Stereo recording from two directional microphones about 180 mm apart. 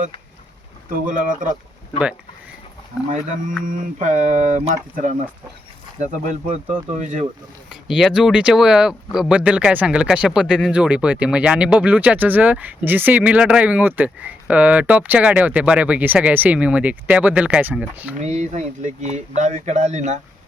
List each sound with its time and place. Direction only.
1.0 s speech: 45° right (ahead or behind)
3.7 s speech: 45° right (ahead or behind)
7.7 s speech: 5° right (ahead or behind)
18.2 s speech: 40° right (ahead or behind)